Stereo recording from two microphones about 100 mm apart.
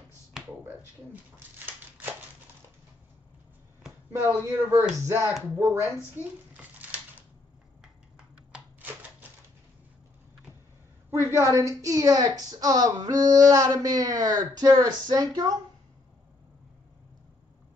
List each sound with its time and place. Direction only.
4.1 s speech: 25° right (ahead or behind)
5.6 s speech: 20° right (ahead or behind)
6.2 s a child's voice: 25° left (ahead or behind)
6.5 s a sound: 15° right (ahead or behind)
8.5 s typewriter: 10° right (ahead or behind)
11.1 s a woman's voice: 25° right (ahead or behind)